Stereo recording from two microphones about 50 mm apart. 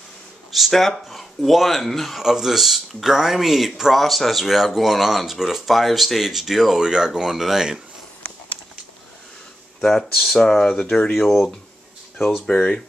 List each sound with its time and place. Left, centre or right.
0.5 s speech: centre
2.2 s speech: centre
9.8 s speech: centre
10.4 s speech: centre
11.1 s speech: centre
12.4 s speech: centre